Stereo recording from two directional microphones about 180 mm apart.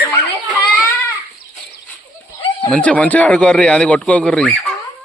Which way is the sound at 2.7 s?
5° left (ahead or behind).